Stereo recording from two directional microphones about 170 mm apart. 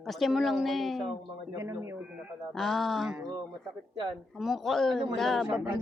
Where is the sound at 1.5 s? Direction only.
15° right (ahead or behind).